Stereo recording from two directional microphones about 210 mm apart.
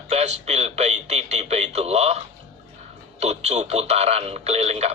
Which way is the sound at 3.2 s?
30° right (ahead or behind).